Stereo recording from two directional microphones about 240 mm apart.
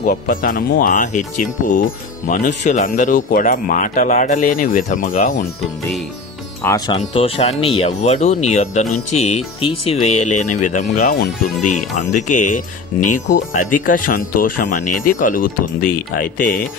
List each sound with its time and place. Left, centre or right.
0.0 s speech: left
6.9 s speech: left